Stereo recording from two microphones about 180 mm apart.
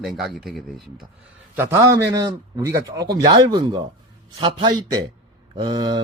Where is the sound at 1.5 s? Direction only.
15° right (ahead or behind).